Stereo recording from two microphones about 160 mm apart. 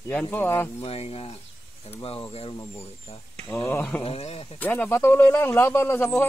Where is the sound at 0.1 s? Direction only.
10° left (ahead or behind).